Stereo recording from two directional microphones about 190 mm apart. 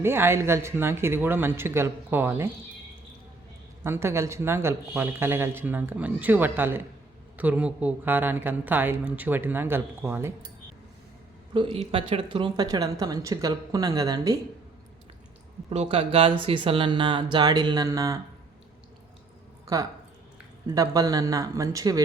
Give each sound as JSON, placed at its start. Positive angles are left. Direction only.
{"t": 0.0, "sound": "speech", "side_deg": -10}
{"t": 3.8, "sound": "speech", "side_deg": -15}
{"t": 11.5, "sound": "speech", "side_deg": -30}
{"t": 15.7, "sound": "speech", "side_deg": -30}
{"t": 20.7, "sound": "speech", "side_deg": -20}